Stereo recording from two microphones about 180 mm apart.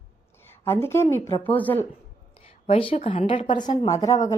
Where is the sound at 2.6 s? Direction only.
30° left (ahead or behind).